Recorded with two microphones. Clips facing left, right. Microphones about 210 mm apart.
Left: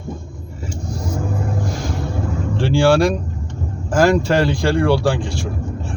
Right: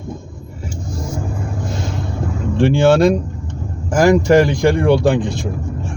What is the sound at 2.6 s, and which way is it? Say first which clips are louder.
Speech: right 3 dB; 20° right (ahead or behind).